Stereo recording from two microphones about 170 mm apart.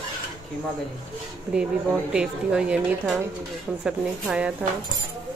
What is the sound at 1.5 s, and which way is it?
A woman's voice, 5° right (ahead or behind).